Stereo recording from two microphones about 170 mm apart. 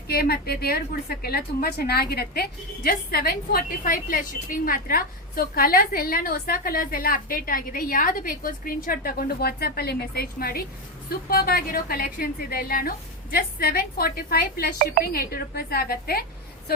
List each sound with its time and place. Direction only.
0.1 s a woman's voice: 65° left (ahead or behind)